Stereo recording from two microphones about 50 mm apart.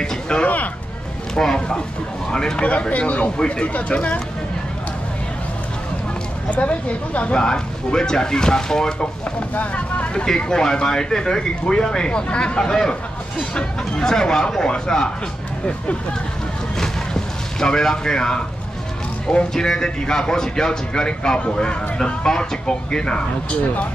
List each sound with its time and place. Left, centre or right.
0.0 s a sound: centre
1.3 s speech: centre
6.5 s speech: left
7.3 s speech: centre
9.6 s speech: left
10.2 s speech: centre
16.8 s a sound: centre
19.2 s speech: centre